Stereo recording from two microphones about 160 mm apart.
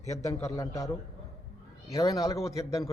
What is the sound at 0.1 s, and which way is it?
A man's voice, 20° left (ahead or behind).